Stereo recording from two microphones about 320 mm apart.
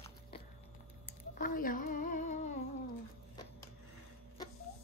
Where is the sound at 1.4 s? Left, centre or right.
Left.